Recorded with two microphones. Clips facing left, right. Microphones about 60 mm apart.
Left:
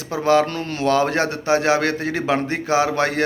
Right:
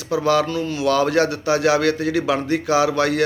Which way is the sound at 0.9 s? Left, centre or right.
Left.